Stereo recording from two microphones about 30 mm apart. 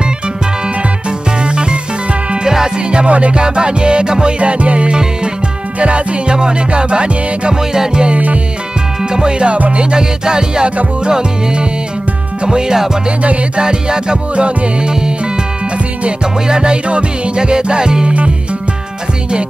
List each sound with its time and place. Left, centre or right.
1.4 s music: right
2.4 s music: right
3.1 s music: right
3.3 s music: right
6.3 s music: right
7.7 s music: right
9.1 s music: right
16.4 s music: right